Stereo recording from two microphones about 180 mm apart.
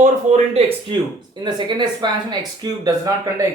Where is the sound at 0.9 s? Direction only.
25° right (ahead or behind).